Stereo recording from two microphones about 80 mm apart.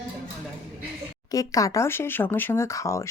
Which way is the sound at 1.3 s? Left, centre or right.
Left.